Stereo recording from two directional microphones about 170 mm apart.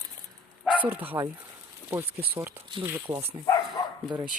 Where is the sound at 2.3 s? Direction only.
10° right (ahead or behind).